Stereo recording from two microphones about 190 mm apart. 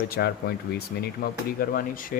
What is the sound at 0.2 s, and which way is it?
Speech, 55° left (ahead or behind).